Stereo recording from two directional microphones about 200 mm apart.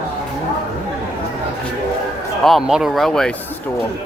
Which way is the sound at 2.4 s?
Centre (ahead or behind).